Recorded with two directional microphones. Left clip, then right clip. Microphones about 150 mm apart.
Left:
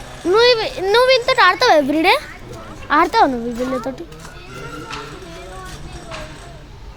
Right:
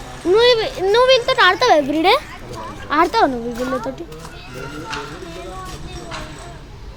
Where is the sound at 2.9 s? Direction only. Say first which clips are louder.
Left 2 dB; 35° left (ahead or behind).